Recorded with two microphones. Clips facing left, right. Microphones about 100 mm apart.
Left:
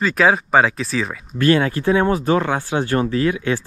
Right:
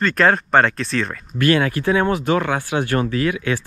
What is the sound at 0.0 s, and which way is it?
Speech, 5° left (ahead or behind).